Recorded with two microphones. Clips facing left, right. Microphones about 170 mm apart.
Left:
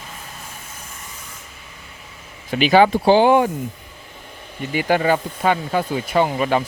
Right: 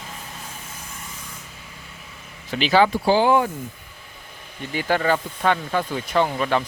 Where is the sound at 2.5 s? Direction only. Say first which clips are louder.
Left 4 dB; 15° left (ahead or behind).